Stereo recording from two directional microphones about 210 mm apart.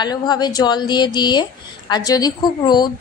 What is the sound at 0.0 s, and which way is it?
A woman's voice, 20° left (ahead or behind).